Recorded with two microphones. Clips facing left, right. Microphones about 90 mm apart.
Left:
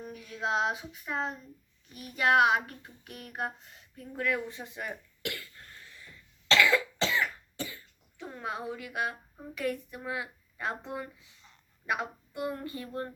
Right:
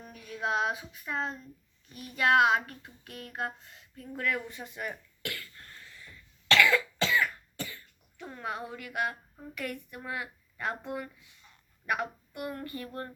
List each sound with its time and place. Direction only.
0.0 s female singing: 20° left (ahead or behind)
0.4 s speech: 20° left (ahead or behind)
6.5 s cough: 20° left (ahead or behind)
8.2 s a woman's voice: 20° left (ahead or behind)